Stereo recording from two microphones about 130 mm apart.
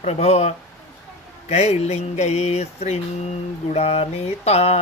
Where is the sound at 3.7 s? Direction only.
50° left (ahead or behind).